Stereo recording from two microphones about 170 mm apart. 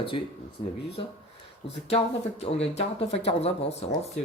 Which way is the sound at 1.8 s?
35° left (ahead or behind).